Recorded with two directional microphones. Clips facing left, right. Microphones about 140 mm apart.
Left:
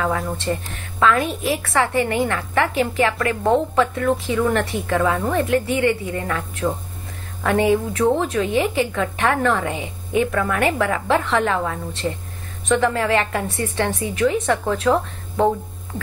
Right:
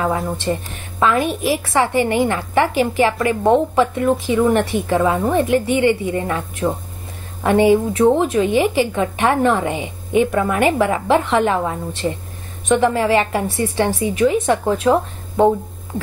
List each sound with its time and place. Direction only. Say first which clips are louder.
0.0 s a woman's voice: right 3 dB; 20° right (ahead or behind)